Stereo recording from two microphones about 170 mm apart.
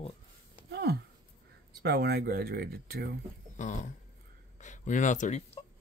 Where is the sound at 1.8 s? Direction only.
70° right (ahead or behind).